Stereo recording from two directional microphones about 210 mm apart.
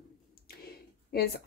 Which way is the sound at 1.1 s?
45° left (ahead or behind).